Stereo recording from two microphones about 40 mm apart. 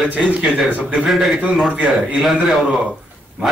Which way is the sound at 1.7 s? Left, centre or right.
Right.